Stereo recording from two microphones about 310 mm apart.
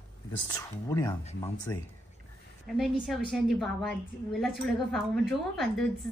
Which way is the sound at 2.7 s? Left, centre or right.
Centre.